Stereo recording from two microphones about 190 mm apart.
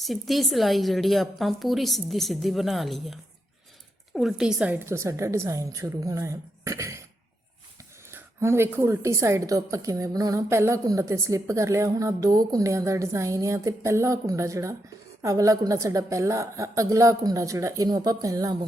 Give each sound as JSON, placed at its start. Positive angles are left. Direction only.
{"t": 0.0, "sound": "a woman's voice", "side_deg": 0}
{"t": 8.1, "sound": "a woman's voice", "side_deg": -15}